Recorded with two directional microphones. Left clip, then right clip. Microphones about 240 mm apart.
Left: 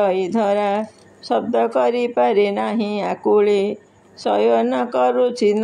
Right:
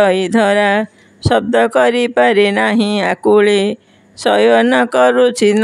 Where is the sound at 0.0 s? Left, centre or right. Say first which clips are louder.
Right 6 dB; right.